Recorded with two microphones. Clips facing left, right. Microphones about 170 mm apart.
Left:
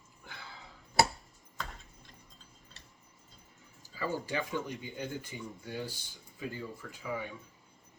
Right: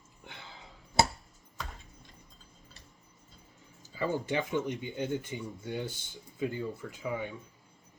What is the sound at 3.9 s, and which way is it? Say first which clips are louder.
Speech: right 4 dB; 20° right (ahead or behind).